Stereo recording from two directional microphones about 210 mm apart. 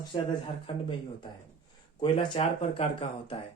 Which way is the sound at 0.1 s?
25° left (ahead or behind).